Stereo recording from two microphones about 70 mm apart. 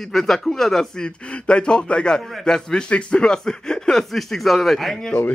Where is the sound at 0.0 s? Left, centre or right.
Centre.